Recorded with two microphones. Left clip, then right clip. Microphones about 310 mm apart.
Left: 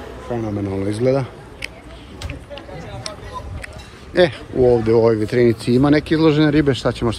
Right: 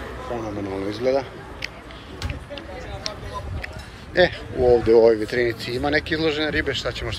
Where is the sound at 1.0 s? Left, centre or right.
Centre.